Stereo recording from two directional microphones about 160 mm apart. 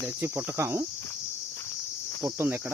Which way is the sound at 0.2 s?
15° right (ahead or behind).